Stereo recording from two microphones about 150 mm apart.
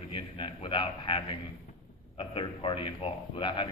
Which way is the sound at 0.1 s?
35° left (ahead or behind).